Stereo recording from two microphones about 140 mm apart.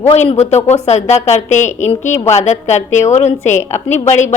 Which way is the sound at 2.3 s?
55° left (ahead or behind).